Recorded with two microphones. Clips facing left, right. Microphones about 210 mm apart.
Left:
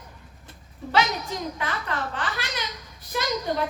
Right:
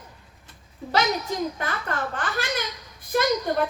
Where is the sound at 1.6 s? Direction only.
45° right (ahead or behind).